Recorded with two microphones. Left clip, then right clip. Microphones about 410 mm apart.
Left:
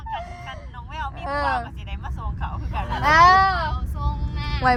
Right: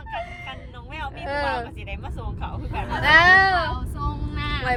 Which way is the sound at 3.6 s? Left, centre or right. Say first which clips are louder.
Right 2 dB; centre.